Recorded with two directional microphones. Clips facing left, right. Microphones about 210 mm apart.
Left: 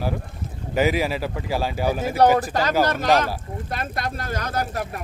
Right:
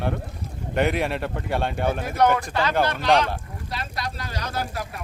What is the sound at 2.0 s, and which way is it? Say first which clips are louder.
Speech: left 4 dB; 30° left (ahead or behind).